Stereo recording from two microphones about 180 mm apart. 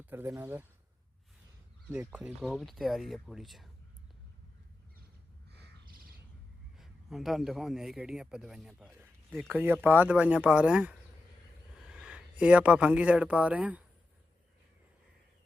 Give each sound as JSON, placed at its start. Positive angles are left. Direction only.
{"t": 0.0, "sound": "speech", "side_deg": -10}
{"t": 2.1, "sound": "a man's voice", "side_deg": -5}
{"t": 5.5, "sound": "a sound", "side_deg": -65}
{"t": 6.7, "sound": "a man's voice", "side_deg": 0}